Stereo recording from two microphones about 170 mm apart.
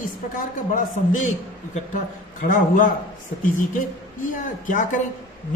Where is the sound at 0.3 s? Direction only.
50° left (ahead or behind).